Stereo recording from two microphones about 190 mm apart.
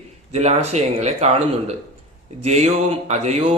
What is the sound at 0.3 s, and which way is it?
A man's voice, 35° right (ahead or behind).